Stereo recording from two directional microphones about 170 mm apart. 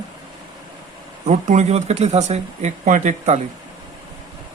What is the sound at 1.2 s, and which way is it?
Speech, 45° right (ahead or behind).